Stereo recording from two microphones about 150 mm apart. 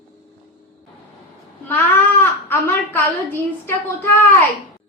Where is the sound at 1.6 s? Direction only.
15° left (ahead or behind).